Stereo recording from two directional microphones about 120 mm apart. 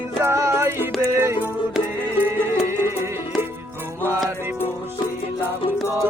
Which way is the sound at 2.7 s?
20° right (ahead or behind).